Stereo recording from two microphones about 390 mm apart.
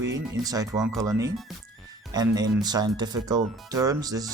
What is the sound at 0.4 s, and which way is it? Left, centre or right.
Speech, centre.